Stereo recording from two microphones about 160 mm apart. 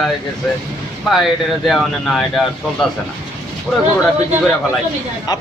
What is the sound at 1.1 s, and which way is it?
Speech, centre (ahead or behind).